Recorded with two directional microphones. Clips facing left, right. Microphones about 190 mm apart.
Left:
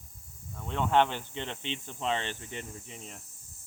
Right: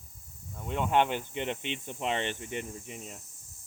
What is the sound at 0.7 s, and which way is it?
Speech, 10° right (ahead or behind).